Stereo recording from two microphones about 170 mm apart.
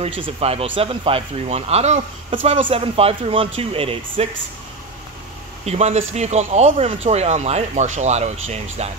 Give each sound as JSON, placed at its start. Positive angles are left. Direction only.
{"t": 0.2, "sound": "speech", "side_deg": -35}
{"t": 5.7, "sound": "speech", "side_deg": -40}